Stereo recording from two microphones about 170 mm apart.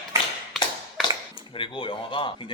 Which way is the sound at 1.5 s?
30° left (ahead or behind).